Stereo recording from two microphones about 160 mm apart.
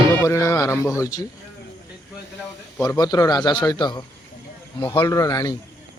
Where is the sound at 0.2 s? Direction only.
15° left (ahead or behind).